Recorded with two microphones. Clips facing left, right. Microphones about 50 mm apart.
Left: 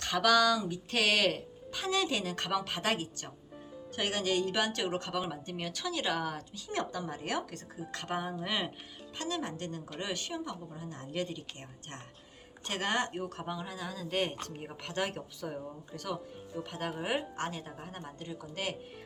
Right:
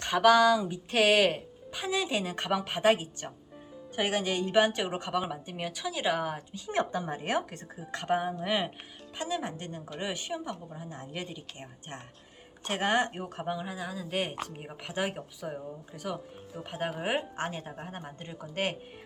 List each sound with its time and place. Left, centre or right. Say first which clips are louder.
0.0 s speech: right 5 dB; centre
7.8 s speech: right 6 dB; centre
12.7 s speech: right 4 dB; right